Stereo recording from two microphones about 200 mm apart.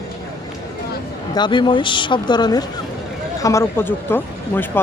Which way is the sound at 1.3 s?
25° left (ahead or behind).